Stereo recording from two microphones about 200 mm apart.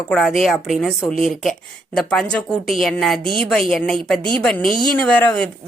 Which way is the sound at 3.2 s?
25° right (ahead or behind).